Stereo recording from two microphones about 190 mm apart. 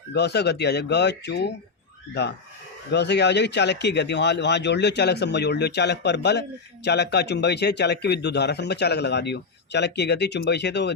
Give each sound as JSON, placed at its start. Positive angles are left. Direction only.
{"t": 0.1, "sound": "speech", "side_deg": 60}
{"t": 2.9, "sound": "speech", "side_deg": 65}